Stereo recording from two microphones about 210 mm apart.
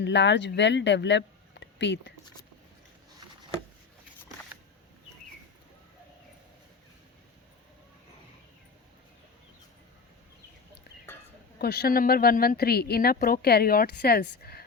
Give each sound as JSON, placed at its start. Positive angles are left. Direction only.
{"t": 0.0, "sound": "speech", "side_deg": 55}
{"t": 11.6, "sound": "speech", "side_deg": 50}